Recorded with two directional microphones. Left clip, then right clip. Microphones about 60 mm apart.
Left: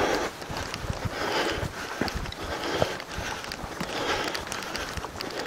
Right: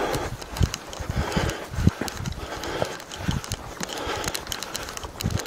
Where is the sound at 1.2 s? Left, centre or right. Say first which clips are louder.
Left 1 dB; centre.